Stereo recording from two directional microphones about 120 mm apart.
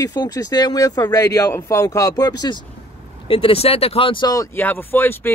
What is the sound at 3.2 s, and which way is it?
Speech, 50° left (ahead or behind).